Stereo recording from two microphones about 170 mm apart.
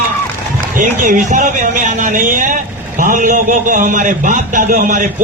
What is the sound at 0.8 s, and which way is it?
A man's voice, 50° right (ahead or behind).